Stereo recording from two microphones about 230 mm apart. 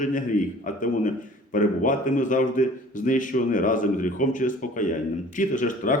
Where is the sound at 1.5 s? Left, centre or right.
Left.